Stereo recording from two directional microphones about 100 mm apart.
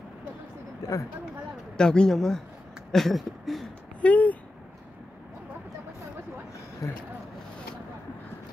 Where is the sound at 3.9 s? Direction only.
15° left (ahead or behind).